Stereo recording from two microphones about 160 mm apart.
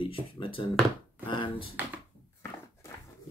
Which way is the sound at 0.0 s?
35° left (ahead or behind).